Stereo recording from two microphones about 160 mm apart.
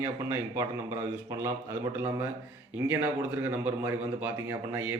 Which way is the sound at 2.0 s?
15° right (ahead or behind).